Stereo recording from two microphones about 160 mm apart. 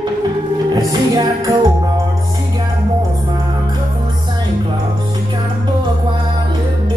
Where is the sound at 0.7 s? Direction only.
20° right (ahead or behind).